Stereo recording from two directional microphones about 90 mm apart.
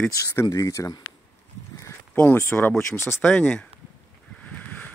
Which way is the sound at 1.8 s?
30° left (ahead or behind).